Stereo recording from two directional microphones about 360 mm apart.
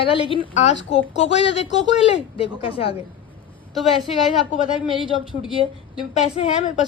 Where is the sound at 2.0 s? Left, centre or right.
Centre.